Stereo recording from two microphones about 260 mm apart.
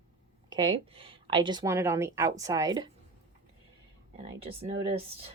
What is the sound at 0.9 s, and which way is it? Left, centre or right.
Speech, right.